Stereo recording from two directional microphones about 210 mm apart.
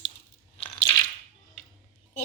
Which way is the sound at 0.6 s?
20° left (ahead or behind).